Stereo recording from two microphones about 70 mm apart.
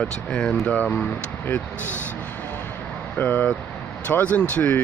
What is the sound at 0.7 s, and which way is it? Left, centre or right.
Speech, left.